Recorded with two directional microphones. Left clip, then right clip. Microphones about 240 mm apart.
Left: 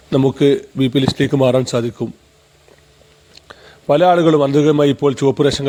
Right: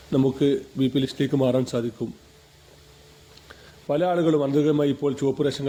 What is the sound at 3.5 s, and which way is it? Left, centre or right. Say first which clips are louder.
A man's voice: left 11 dB; left.